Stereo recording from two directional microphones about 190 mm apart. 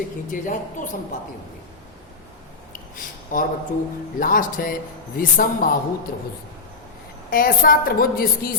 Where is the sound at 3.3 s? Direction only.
45° left (ahead or behind).